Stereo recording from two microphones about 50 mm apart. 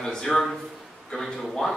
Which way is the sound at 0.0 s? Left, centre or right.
Centre.